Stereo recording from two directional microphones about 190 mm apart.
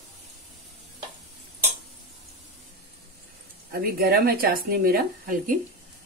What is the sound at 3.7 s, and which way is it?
Speech, 50° right (ahead or behind).